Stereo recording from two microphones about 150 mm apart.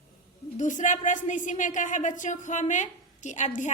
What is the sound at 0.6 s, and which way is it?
A woman's voice, 55° left (ahead or behind).